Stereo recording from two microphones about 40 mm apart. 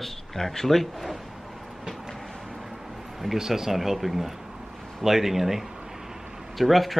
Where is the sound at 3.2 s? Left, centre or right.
Centre.